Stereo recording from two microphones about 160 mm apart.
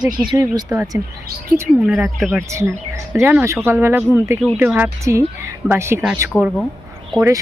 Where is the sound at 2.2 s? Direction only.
15° right (ahead or behind).